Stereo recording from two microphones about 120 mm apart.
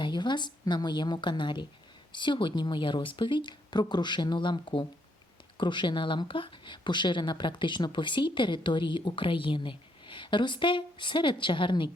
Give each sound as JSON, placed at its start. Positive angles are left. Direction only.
{"t": 0.0, "sound": "speech", "side_deg": 40}